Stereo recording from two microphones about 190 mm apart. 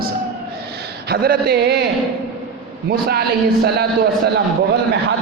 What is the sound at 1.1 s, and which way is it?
Speech, 55° right (ahead or behind).